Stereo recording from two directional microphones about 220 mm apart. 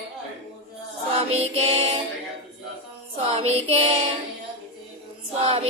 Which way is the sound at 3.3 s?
25° right (ahead or behind).